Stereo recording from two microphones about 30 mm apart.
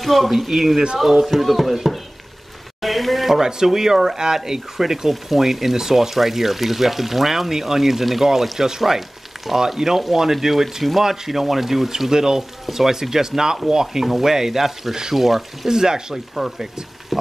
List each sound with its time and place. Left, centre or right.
0.0 s speech: centre
2.8 s a sound: centre
3.4 s speech: centre
12.1 s speech: centre
14.0 s speech: centre
15.7 s speech: right
16.3 s speech: centre
17.1 s a sound: centre